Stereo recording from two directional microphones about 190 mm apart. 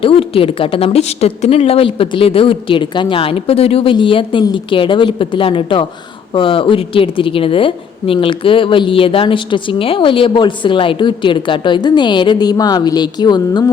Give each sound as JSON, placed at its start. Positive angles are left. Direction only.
{"t": 0.0, "sound": "a woman's voice", "side_deg": 30}